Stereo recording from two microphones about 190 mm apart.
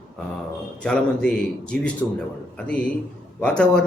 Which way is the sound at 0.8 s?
5° left (ahead or behind).